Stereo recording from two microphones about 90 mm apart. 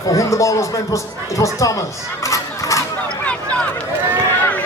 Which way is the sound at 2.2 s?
35° left (ahead or behind).